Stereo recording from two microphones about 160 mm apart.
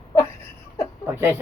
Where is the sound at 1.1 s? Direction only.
15° right (ahead or behind).